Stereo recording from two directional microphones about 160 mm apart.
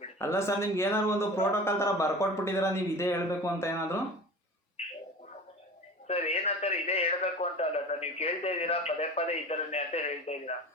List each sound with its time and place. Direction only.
0.2 s speech: 15° left (ahead or behind)
6.1 s a man's voice: 40° left (ahead or behind)